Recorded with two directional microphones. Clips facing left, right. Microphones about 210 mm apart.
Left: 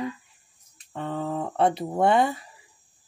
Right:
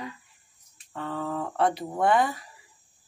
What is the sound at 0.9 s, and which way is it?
Speech, 20° left (ahead or behind).